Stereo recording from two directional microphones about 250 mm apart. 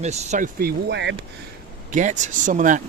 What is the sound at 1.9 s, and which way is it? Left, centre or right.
Speech, right.